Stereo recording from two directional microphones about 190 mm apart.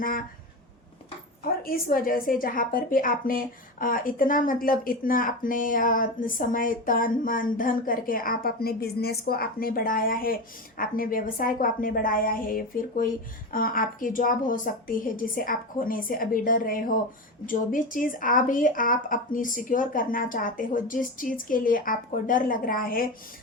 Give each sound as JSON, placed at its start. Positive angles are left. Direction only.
{"t": 0.0, "sound": "a woman's voice", "side_deg": 45}
{"t": 1.6, "sound": "a woman's voice", "side_deg": 50}